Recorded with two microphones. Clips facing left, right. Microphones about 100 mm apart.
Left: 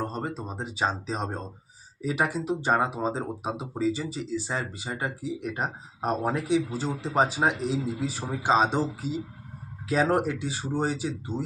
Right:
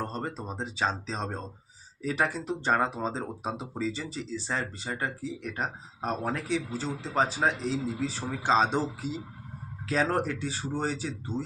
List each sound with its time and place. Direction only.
0.0 s speech: 5° left (ahead or behind)
9.8 s speech: 10° left (ahead or behind)